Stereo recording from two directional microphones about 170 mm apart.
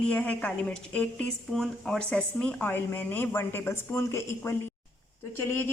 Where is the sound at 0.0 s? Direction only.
10° left (ahead or behind).